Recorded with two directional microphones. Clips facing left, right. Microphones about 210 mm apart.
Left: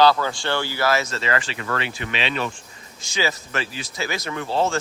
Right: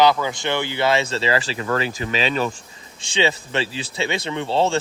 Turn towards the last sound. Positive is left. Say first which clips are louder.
# right 2 dB
turn(degrees=-30)  # may be behind; listen again after turning